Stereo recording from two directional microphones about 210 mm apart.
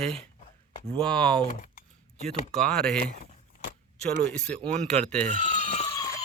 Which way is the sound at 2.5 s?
5° left (ahead or behind).